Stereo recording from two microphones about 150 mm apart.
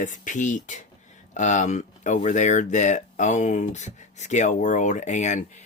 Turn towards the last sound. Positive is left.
turn(degrees=55)  # may be behind; listen again after turning